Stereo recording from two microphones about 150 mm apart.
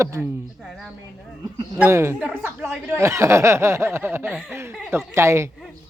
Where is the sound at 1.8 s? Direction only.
15° right (ahead or behind).